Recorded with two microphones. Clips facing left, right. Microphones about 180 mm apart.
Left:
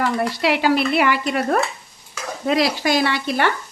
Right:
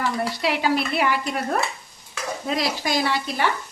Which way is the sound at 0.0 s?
70° left (ahead or behind).